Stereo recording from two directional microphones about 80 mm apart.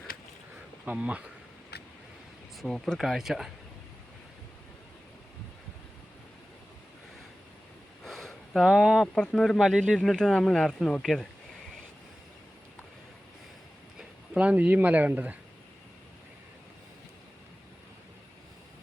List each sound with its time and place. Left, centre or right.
0.9 s speech: centre
2.6 s speech: centre
8.0 s a sound: centre
8.6 s speech: centre
9.1 s speech: centre
9.6 s speech: centre
10.0 s speech: centre
14.3 s speech: centre